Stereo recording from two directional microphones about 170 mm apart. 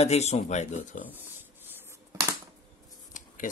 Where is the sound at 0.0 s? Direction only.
40° left (ahead or behind).